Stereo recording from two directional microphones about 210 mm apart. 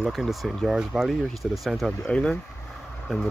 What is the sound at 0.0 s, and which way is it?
Speech, centre (ahead or behind).